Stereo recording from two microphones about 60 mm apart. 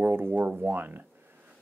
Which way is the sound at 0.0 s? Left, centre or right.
Right.